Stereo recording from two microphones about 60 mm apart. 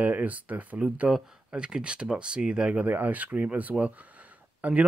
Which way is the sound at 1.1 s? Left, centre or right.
Centre.